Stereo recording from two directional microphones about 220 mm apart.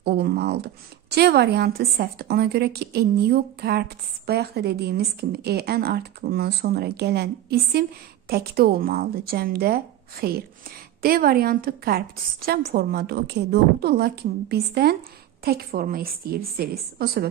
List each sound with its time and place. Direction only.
0.0 s a woman's voice: 50° right (ahead or behind)